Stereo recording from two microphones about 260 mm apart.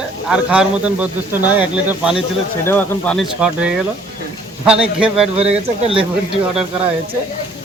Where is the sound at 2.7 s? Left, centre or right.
Centre.